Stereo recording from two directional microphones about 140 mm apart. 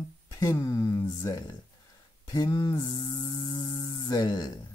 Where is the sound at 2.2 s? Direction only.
30° left (ahead or behind).